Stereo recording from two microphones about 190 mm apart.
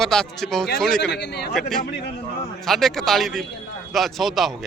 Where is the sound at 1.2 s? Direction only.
60° left (ahead or behind).